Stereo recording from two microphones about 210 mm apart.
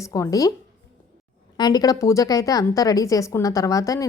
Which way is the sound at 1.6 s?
20° left (ahead or behind).